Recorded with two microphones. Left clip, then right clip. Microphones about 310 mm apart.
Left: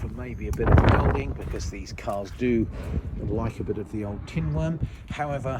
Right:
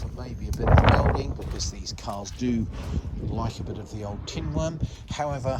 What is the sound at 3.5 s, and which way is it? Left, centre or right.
Speech, centre.